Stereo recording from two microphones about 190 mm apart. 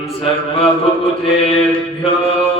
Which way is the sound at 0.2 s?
30° left (ahead or behind).